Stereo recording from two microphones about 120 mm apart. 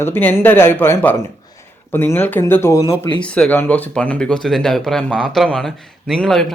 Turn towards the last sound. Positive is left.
turn(degrees=5)  # may be behind; listen again after turning